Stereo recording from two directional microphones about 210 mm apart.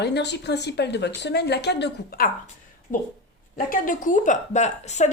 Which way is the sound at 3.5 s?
40° left (ahead or behind).